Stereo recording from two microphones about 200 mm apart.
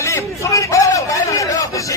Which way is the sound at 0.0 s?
15° left (ahead or behind).